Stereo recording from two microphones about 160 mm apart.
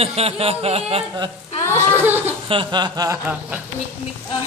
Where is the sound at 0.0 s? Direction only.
40° right (ahead or behind).